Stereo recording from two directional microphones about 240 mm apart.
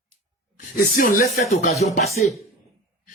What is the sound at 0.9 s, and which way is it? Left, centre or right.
Speech, left.